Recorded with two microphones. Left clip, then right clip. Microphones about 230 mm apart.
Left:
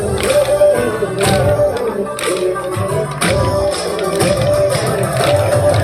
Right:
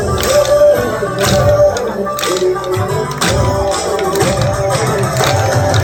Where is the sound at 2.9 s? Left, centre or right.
Left.